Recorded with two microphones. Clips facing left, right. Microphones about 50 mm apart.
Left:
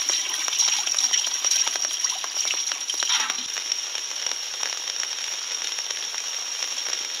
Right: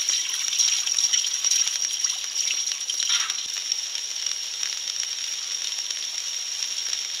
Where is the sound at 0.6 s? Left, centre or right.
Centre.